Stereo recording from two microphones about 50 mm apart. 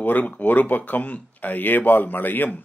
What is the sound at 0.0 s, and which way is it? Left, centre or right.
A man's voice, left.